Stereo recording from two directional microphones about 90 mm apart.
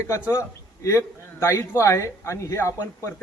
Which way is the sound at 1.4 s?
35° left (ahead or behind).